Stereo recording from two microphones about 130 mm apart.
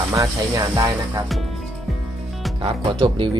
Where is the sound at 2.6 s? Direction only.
40° right (ahead or behind).